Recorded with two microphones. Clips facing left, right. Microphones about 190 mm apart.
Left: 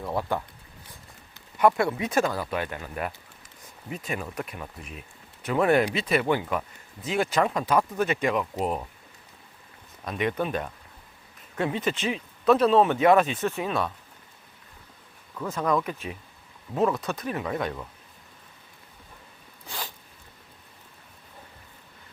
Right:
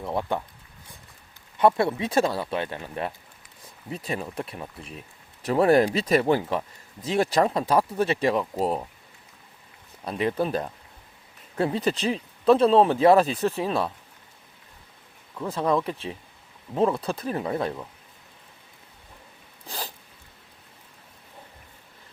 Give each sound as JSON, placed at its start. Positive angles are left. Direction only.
{"t": 0.0, "sound": "speech", "side_deg": -20}
{"t": 1.5, "sound": "speech", "side_deg": -25}
{"t": 10.1, "sound": "speech", "side_deg": -30}
{"t": 15.4, "sound": "speech", "side_deg": -30}
{"t": 19.6, "sound": "sneeze", "side_deg": -35}